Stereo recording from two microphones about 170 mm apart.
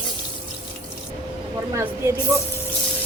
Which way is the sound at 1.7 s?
15° right (ahead or behind).